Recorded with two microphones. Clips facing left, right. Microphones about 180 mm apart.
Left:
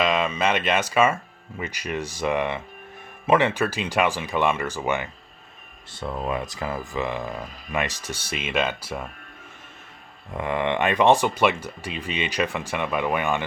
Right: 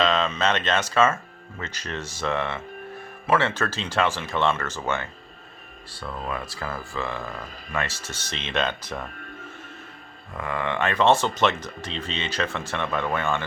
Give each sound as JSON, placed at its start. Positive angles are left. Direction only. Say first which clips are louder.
{"t": 0.0, "sound": "speech", "louder": "even", "side_deg": 10}
{"t": 10.3, "sound": "speech", "louder": "left 4 dB", "side_deg": 20}